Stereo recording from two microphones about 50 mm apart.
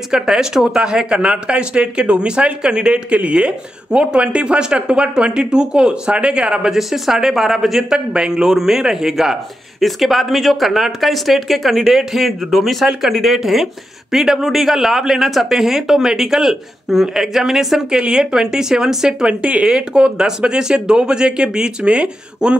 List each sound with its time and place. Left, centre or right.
0.1 s speech: centre
6.8 s a man's voice: centre